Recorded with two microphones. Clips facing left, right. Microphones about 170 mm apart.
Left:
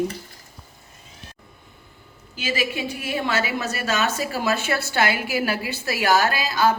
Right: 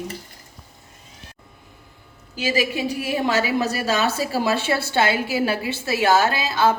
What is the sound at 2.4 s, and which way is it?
A woman's voice, 35° right (ahead or behind).